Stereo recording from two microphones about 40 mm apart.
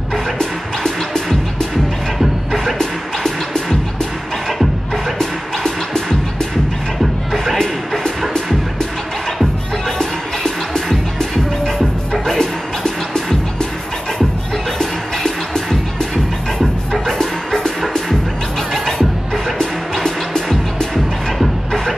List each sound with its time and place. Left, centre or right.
0.4 s music: centre
2.1 s music: centre
2.8 s music: centre
9.8 s music: centre
12.4 s music: centre
14.8 s music: centre